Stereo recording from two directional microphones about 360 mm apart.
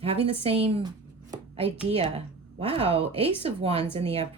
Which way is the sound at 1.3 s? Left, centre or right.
Centre.